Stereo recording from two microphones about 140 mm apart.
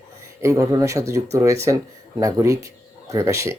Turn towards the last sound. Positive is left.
turn(degrees=-20)  # may be behind; listen again after turning